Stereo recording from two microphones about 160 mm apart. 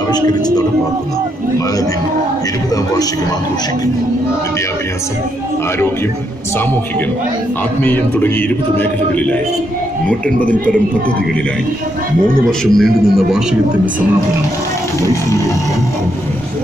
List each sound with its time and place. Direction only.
0.1 s speech: 25° left (ahead or behind)
7.8 s speech: 10° left (ahead or behind)
12.4 s a man's voice: centre (ahead or behind)